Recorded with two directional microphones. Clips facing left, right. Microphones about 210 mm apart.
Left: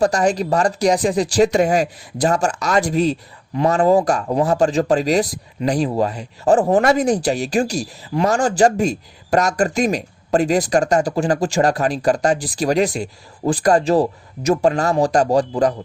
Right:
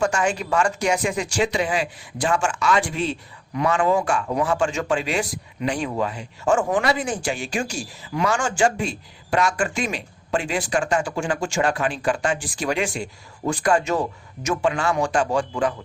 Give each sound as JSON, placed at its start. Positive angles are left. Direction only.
{"t": 0.0, "sound": "speech", "side_deg": 35}